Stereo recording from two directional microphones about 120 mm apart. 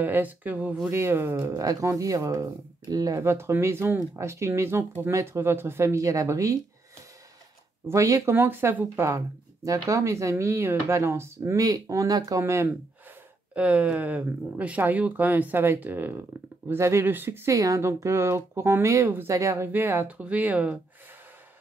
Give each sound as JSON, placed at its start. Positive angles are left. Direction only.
{"t": 0.0, "sound": "speech", "side_deg": -15}
{"t": 7.9, "sound": "speech", "side_deg": -25}
{"t": 13.6, "sound": "speech", "side_deg": -10}